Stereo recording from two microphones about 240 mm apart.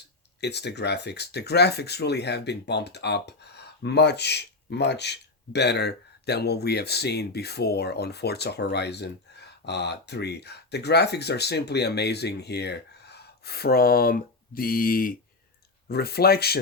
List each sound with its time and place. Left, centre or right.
0.4 s speech: left